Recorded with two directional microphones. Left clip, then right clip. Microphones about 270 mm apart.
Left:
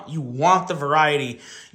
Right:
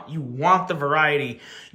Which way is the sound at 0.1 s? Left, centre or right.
Centre.